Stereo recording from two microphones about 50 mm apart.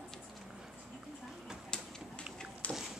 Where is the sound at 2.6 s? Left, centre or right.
Left.